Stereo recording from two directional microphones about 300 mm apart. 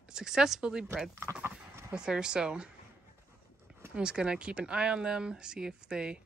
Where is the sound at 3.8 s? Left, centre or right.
Centre.